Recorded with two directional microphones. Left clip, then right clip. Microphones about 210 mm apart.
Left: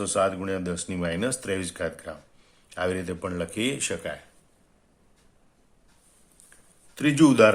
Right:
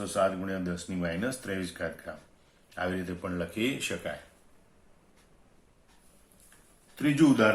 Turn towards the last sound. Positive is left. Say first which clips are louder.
# left 6 dB
turn(degrees=50)  # may be behind; listen again after turning